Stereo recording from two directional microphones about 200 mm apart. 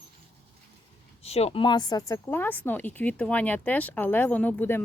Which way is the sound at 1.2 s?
30° left (ahead or behind).